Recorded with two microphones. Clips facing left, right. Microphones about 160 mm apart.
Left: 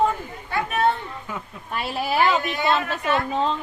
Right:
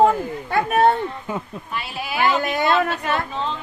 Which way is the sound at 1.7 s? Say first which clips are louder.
Left 3 dB; 40° left (ahead or behind).